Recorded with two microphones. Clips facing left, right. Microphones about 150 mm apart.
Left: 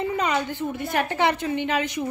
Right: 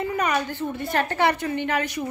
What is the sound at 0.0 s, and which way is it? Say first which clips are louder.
A woman's voice: even; 20° left (ahead or behind).